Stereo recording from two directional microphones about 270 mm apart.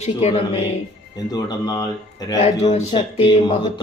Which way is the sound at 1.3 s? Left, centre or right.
Centre.